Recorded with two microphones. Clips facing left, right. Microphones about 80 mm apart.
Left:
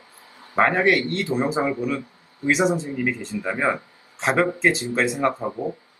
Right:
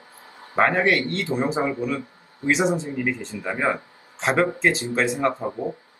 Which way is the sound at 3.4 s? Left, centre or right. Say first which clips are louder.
Left 1 dB; centre.